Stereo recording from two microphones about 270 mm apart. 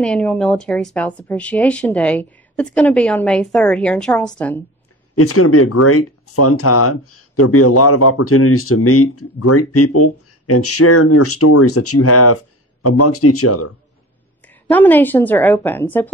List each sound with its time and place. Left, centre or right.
0.0 s a woman's voice: centre
5.1 s speech: left
14.4 s a woman's voice: centre